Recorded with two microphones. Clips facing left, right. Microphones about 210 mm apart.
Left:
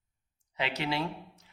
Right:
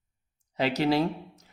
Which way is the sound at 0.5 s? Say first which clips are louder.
Right 8 dB; 40° right (ahead or behind).